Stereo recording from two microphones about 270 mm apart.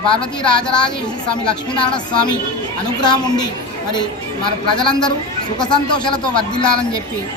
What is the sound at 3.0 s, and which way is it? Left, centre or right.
Speech, centre.